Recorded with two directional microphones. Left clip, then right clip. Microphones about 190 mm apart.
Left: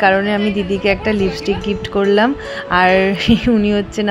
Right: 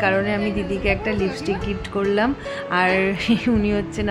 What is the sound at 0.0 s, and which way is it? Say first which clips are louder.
Speech: left 7 dB; 25° left (ahead or behind).